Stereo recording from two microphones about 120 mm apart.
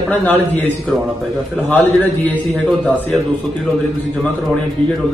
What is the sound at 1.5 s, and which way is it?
Speech, 10° left (ahead or behind).